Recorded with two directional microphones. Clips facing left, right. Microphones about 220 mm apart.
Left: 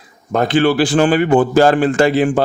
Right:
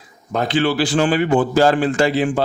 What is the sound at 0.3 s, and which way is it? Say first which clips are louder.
Speech: left 4 dB; 50° left (ahead or behind).